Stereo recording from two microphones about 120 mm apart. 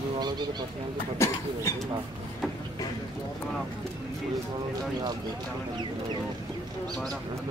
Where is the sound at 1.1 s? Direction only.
25° left (ahead or behind).